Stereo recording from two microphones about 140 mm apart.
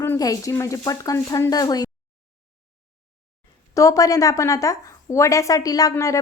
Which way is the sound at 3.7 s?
25° left (ahead or behind).